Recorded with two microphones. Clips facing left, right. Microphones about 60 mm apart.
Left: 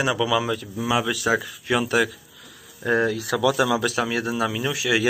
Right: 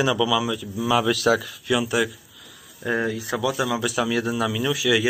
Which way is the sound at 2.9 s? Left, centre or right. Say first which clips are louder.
Left 3 dB; left.